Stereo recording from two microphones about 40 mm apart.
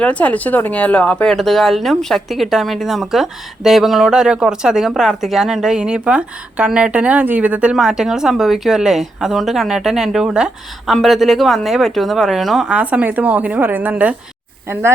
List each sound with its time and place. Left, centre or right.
0.0 s speech: left
1.3 s speech: centre
2.3 s a woman's voice: centre
5.7 s speech: right
7.8 s a woman's voice: centre
10.8 s speech: centre
12.7 s a woman's voice: right
13.9 s speech: right
14.7 s speech: right